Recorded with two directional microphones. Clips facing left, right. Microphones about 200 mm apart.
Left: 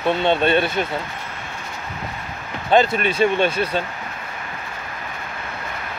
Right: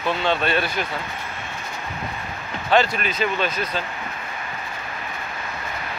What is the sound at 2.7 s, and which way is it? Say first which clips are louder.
Speech: left 3 dB; 25° left (ahead or behind).